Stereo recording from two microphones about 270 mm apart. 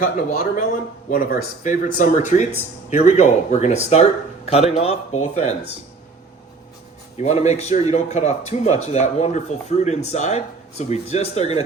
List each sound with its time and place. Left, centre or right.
0.0 s a man's voice: left
7.2 s a man's voice: left